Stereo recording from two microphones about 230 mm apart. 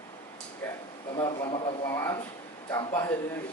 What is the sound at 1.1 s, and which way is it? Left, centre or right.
Speech, centre.